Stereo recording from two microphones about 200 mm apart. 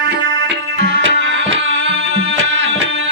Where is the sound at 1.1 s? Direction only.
70° right (ahead or behind).